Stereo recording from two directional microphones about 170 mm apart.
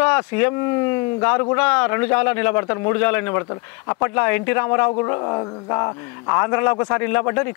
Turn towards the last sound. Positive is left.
turn(degrees=15)  # may be behind; listen again after turning